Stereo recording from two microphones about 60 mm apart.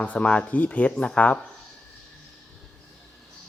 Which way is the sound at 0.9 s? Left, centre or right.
Centre.